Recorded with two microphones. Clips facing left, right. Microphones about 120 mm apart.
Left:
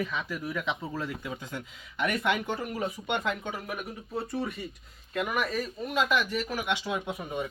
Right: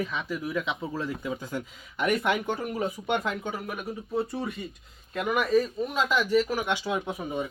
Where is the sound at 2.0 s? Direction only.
15° right (ahead or behind).